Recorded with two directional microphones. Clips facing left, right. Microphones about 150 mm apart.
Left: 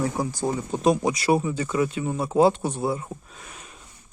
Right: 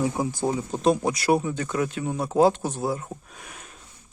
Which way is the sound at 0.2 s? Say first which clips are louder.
Right 1 dB; 20° right (ahead or behind).